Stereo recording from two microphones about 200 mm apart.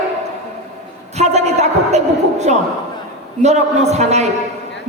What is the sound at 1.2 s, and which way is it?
A woman's voice, 35° right (ahead or behind).